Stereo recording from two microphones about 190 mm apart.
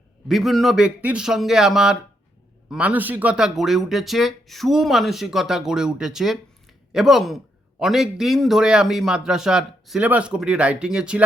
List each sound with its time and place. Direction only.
0.3 s a man's voice: centre (ahead or behind)